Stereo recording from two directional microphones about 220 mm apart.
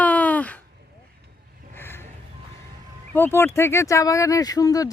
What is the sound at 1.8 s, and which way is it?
Music, 10° left (ahead or behind).